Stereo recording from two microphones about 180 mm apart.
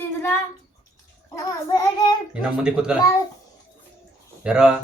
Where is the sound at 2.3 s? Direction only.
5° right (ahead or behind).